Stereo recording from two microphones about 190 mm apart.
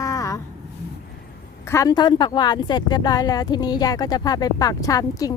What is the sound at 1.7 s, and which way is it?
Speech, 20° left (ahead or behind).